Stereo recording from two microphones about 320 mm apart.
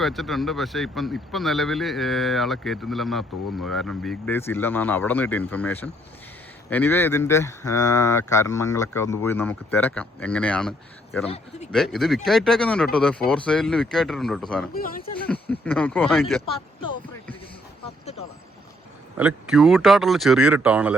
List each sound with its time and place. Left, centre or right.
0.0 s speech: centre
14.7 s speech: left
15.3 s speech: centre
19.1 s speech: centre